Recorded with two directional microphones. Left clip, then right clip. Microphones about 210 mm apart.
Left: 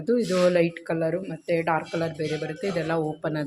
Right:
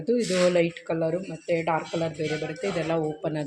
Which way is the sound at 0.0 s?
5° left (ahead or behind).